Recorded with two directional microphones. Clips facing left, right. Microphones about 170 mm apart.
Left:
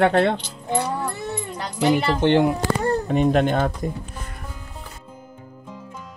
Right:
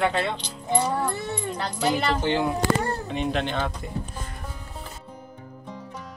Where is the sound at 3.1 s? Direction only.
45° left (ahead or behind).